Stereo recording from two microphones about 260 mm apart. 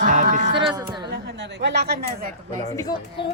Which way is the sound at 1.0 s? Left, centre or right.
Right.